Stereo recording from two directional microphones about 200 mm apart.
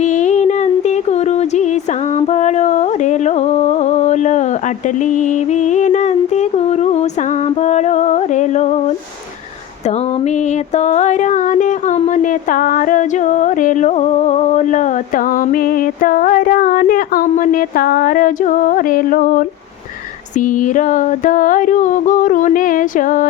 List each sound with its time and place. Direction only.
0.0 s music: 35° left (ahead or behind)
10.8 s speech: 35° left (ahead or behind)